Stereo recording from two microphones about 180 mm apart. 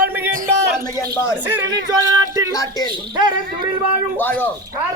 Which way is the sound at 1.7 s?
20° right (ahead or behind).